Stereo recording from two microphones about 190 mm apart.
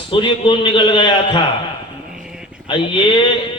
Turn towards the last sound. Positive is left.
turn(degrees=25)  # may be behind; listen again after turning